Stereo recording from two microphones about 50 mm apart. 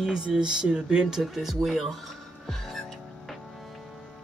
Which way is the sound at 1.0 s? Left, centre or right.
Centre.